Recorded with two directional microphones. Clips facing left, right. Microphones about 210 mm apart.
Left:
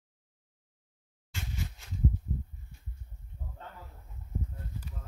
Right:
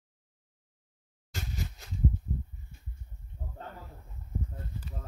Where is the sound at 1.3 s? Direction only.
40° right (ahead or behind).